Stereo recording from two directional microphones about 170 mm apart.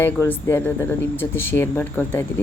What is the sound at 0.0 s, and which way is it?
Speech, 15° left (ahead or behind).